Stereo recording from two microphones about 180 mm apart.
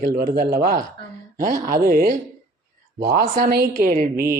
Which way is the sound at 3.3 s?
50° right (ahead or behind).